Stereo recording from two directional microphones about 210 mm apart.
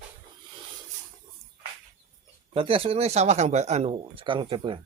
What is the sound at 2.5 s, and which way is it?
Speech, 25° right (ahead or behind).